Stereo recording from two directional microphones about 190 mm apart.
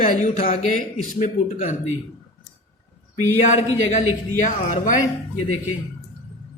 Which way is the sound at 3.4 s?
40° left (ahead or behind).